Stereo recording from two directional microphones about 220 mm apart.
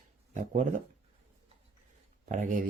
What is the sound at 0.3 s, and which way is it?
Speech, 35° right (ahead or behind).